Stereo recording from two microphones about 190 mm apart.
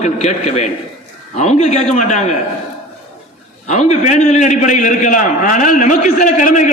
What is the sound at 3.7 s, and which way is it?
A man's voice, 35° left (ahead or behind).